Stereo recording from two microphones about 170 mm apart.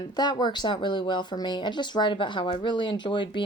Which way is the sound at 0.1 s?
25° left (ahead or behind).